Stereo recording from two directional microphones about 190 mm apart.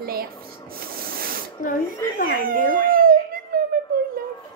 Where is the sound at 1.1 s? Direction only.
50° right (ahead or behind).